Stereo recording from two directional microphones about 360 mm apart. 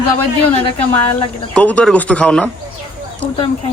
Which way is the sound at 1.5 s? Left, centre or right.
Centre.